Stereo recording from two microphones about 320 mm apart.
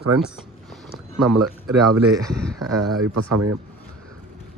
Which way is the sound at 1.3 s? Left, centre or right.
Right.